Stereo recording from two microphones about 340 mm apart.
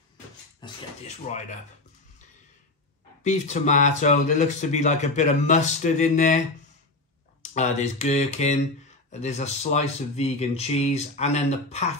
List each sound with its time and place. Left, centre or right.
0.6 s a sound: centre
3.3 s speech: left
7.5 s speech: centre